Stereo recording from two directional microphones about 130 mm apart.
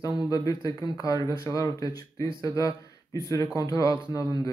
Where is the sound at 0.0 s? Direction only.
30° left (ahead or behind).